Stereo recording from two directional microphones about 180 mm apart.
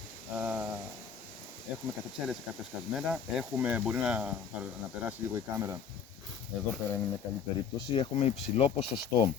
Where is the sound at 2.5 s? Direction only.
5° right (ahead or behind).